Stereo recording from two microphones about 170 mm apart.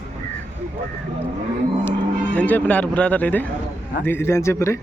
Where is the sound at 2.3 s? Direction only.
10° left (ahead or behind).